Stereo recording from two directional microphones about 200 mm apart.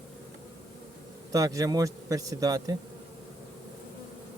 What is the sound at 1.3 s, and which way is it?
A man's voice, 15° right (ahead or behind).